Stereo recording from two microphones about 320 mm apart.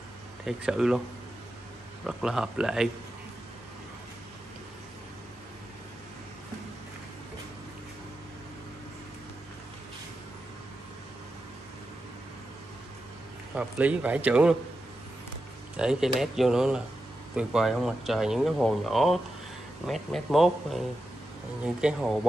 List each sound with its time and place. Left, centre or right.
0.5 s speech: centre
2.0 s speech: centre
13.6 s speech: centre
15.7 s speech: centre